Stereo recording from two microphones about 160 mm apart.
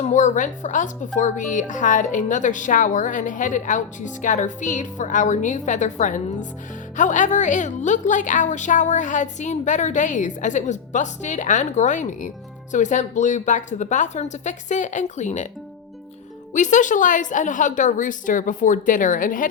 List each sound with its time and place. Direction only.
0.0 s speech: 50° left (ahead or behind)
16.5 s speech: 50° left (ahead or behind)